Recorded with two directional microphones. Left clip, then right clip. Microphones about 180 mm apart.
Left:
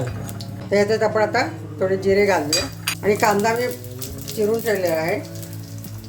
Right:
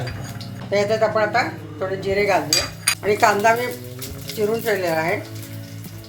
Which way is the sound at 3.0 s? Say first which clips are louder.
Right 2 dB; 25° left (ahead or behind).